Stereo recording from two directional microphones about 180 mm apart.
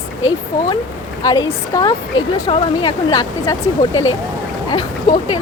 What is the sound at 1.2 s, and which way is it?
Speech, 20° left (ahead or behind).